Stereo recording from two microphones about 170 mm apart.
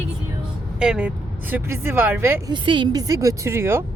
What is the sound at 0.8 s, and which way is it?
Speech, 5° right (ahead or behind).